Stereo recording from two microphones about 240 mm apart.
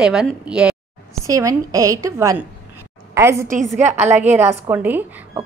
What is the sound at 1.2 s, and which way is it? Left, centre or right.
A woman's voice, centre.